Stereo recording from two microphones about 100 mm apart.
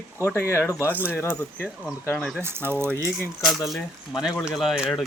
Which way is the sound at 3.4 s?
Centre (ahead or behind).